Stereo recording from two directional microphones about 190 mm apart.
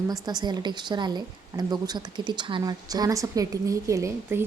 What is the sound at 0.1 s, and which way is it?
A woman's voice, 20° right (ahead or behind).